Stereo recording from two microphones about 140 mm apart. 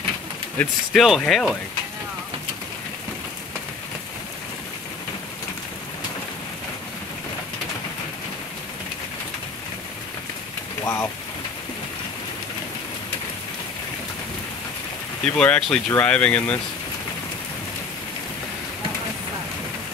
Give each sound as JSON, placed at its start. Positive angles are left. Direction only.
{"t": 0.6, "sound": "speech", "side_deg": 10}
{"t": 10.8, "sound": "rain", "side_deg": 20}
{"t": 15.2, "sound": "speech", "side_deg": 10}